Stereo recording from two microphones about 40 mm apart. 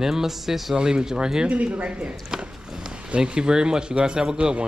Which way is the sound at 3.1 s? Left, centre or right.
Right.